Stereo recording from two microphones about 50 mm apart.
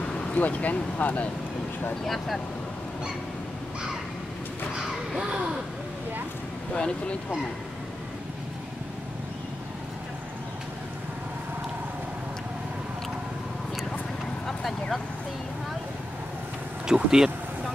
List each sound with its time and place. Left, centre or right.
0.0 s vehicle: centre
0.4 s speech: left
2.0 s speech: centre
5.2 s speech: right
6.7 s speech: centre
14.4 s a sound: centre
16.8 s speech: centre